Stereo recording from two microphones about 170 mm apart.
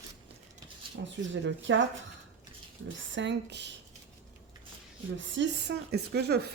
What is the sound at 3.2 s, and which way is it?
Speech, 90° right.